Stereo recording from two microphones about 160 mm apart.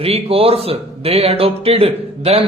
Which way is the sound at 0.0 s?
35° right (ahead or behind).